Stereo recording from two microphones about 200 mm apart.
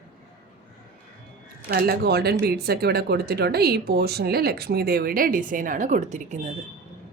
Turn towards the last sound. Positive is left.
turn(degrees=-35)  # may be behind; listen again after turning